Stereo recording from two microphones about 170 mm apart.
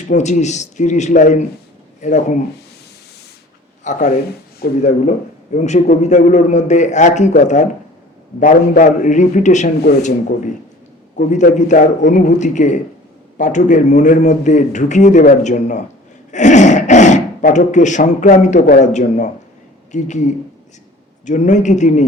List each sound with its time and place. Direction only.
0.1 s speech: 45° left (ahead or behind)
3.8 s speech: 45° left (ahead or behind)